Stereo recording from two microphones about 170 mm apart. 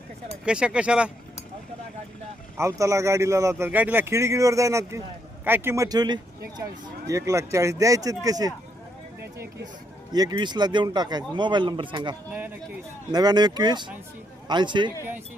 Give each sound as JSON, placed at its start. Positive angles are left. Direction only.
{"t": 0.4, "sound": "speech", "side_deg": -5}
{"t": 2.6, "sound": "a man's voice", "side_deg": -15}
{"t": 10.1, "sound": "speech", "side_deg": -25}
{"t": 12.3, "sound": "speech", "side_deg": -10}
{"t": 13.1, "sound": "speech", "side_deg": -25}